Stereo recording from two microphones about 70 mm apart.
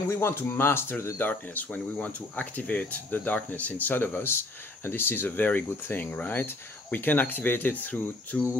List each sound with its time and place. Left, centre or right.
0.1 s speech: left